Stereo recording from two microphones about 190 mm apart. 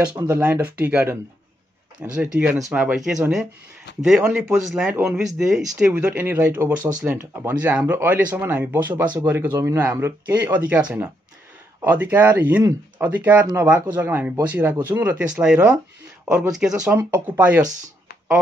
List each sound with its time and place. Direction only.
0.1 s speech: 10° right (ahead or behind)
2.1 s speech: 5° right (ahead or behind)
3.9 s speech: 70° left (ahead or behind)
4.3 s speech: 5° right (ahead or behind)